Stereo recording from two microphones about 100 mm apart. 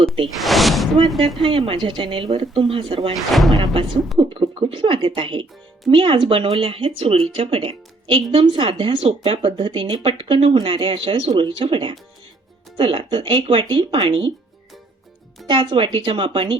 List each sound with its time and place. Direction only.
0.3 s speech: centre (ahead or behind)
1.4 s speech: 55° right (ahead or behind)
3.2 s speech: centre (ahead or behind)
4.2 s speech: 60° right (ahead or behind)
15.4 s speech: 55° right (ahead or behind)